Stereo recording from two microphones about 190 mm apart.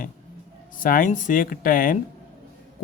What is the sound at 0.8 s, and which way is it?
Speech, 45° left (ahead or behind).